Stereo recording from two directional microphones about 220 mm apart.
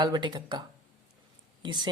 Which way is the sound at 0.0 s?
20° right (ahead or behind).